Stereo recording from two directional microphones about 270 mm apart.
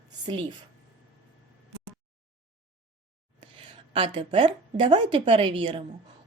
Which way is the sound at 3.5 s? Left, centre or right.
Centre.